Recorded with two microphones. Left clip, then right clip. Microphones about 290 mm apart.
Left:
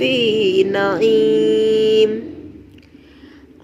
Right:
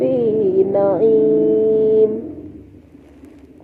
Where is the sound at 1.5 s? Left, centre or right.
Left.